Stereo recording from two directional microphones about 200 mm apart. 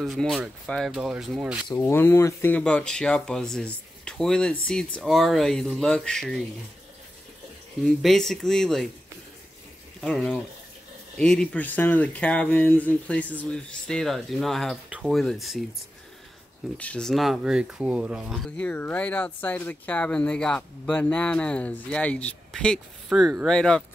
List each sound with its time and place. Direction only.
0.0 s speech: centre (ahead or behind)
1.8 s speech: 10° left (ahead or behind)
7.8 s speech: centre (ahead or behind)
9.9 s speech: centre (ahead or behind)
16.7 s speech: 5° left (ahead or behind)